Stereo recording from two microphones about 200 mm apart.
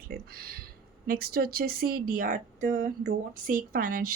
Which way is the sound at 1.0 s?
50° right (ahead or behind).